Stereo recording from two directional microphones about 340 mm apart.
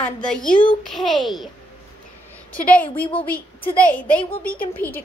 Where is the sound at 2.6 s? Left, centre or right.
Centre.